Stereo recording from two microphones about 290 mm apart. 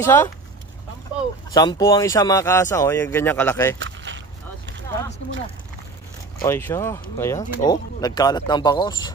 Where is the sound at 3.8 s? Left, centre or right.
Right.